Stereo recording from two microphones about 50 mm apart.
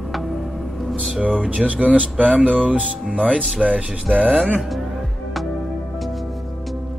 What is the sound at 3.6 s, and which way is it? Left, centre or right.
Speech, centre.